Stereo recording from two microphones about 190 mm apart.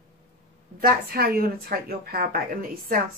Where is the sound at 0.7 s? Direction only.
50° right (ahead or behind).